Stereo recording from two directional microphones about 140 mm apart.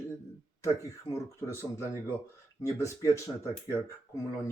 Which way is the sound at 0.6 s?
20° left (ahead or behind).